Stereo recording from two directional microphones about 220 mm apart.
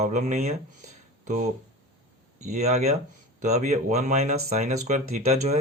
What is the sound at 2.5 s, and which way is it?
Speech, 30° right (ahead or behind).